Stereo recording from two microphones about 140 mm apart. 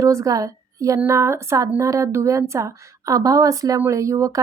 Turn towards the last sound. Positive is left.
turn(degrees=-20)  # may be behind; listen again after turning